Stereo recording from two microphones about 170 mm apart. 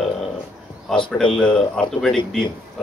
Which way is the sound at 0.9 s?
5° left (ahead or behind).